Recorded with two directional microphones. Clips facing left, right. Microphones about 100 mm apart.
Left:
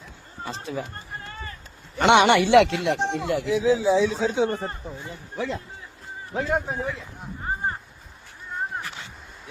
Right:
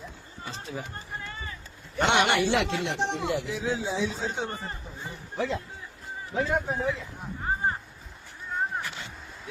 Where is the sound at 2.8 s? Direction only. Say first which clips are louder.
Left 4 dB; 70° left (ahead or behind).